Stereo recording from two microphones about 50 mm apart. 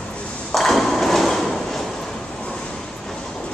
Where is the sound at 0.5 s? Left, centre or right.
Centre.